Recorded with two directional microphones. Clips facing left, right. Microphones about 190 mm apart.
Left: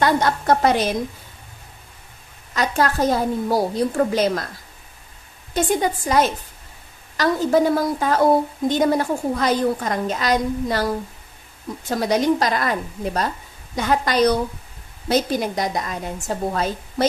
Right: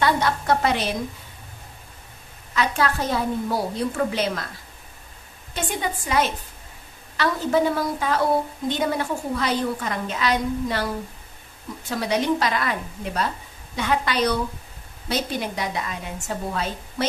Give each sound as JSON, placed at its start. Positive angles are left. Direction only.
{"t": 0.0, "sound": "a woman's voice", "side_deg": 45}
{"t": 2.5, "sound": "a woman's voice", "side_deg": 40}
{"t": 5.5, "sound": "a woman's voice", "side_deg": 40}
{"t": 11.9, "sound": "a woman's voice", "side_deg": 40}